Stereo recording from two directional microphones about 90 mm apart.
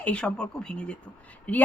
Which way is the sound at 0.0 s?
10° left (ahead or behind).